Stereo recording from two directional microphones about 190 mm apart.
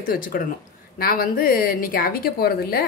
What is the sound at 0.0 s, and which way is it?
A woman's voice, 50° left (ahead or behind).